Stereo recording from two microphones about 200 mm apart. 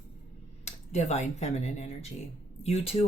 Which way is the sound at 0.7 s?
35° left (ahead or behind).